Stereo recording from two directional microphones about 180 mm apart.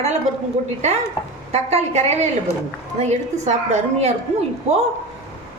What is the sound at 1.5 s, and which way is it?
A woman's voice, 35° right (ahead or behind).